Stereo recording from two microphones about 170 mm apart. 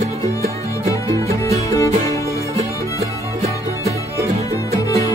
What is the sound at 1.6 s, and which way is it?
Music, 20° left (ahead or behind).